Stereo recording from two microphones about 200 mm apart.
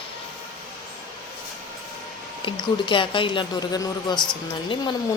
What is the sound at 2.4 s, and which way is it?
A woman's voice, 25° left (ahead or behind).